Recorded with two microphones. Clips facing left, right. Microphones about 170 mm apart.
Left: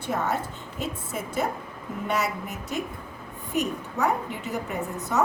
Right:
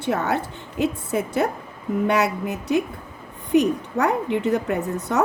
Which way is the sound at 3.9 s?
70° right (ahead or behind).